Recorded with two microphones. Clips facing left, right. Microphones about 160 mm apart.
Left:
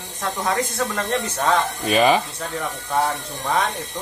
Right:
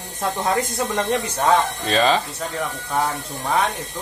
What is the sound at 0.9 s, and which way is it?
Speech, 10° right (ahead or behind).